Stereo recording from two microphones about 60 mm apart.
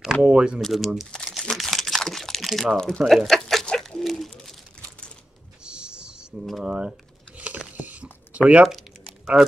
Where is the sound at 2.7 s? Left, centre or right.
Centre.